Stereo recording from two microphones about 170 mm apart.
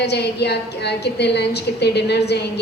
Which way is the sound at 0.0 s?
80° left.